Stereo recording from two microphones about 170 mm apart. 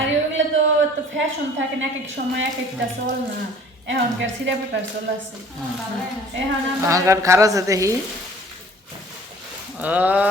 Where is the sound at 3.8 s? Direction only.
90° right.